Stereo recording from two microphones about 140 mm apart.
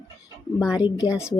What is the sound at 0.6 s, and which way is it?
Speech, 5° right (ahead or behind).